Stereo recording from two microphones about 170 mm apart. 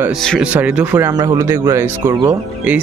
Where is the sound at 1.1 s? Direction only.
20° right (ahead or behind).